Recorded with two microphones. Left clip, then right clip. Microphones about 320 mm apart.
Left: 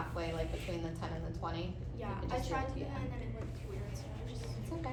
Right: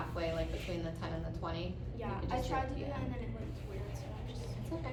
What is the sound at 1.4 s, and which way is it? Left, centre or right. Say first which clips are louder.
A woman's voice: even; centre.